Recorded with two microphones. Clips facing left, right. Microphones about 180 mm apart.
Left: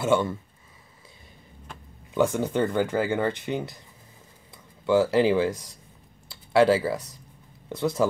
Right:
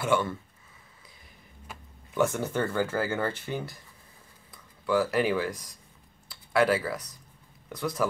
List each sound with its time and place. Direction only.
0.0 s speech: 20° left (ahead or behind)
2.1 s speech: 15° left (ahead or behind)
4.8 s speech: 25° left (ahead or behind)